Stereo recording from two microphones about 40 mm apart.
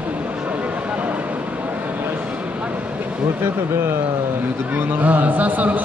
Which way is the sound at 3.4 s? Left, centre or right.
Right.